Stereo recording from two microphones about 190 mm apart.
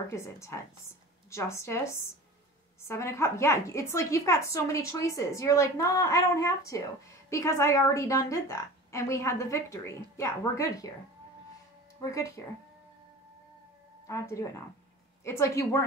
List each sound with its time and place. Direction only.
0.1 s a woman's voice: 15° left (ahead or behind)
2.9 s a woman's voice: 15° left (ahead or behind)
12.0 s a woman's voice: 15° left (ahead or behind)
14.0 s a woman's voice: 15° left (ahead or behind)